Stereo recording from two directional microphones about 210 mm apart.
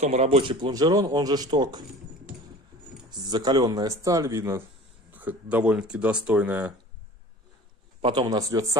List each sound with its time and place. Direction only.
0.0 s speech: 30° right (ahead or behind)
3.1 s speech: 20° right (ahead or behind)
8.0 s speech: 20° right (ahead or behind)